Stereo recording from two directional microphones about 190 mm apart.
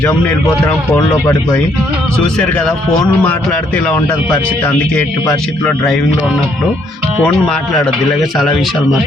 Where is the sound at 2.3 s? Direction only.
5° left (ahead or behind).